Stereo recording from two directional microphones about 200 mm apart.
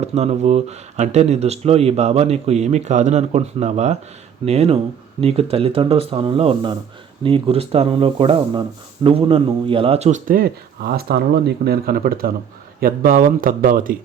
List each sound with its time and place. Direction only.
0.0 s speech: 30° right (ahead or behind)